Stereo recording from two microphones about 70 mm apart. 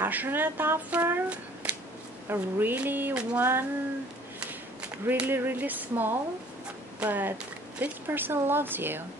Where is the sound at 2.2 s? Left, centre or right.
Right.